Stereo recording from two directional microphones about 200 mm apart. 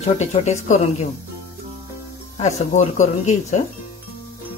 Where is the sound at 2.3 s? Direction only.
35° left (ahead or behind).